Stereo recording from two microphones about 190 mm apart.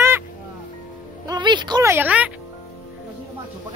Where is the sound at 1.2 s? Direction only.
20° right (ahead or behind).